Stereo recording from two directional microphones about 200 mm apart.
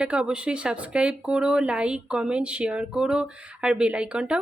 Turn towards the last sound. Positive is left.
turn(degrees=-5)  # may be behind; listen again after turning